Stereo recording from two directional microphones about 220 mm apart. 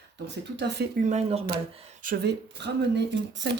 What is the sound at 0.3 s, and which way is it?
Speech, 50° right (ahead or behind).